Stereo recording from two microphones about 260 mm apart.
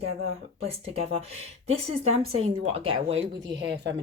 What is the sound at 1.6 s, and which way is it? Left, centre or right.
Speech, right.